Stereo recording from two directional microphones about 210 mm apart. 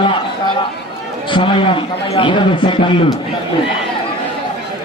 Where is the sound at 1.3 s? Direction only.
25° left (ahead or behind).